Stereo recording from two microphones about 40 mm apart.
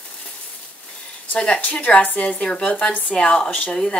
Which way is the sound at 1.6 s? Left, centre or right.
Left.